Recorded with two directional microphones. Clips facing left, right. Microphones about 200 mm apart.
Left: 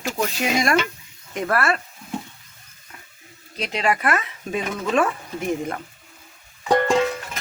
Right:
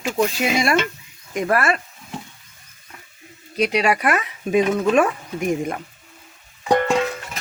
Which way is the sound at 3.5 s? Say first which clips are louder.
Right 4 dB; 15° right (ahead or behind).